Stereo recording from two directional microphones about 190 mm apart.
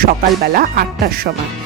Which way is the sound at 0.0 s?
50° right (ahead or behind).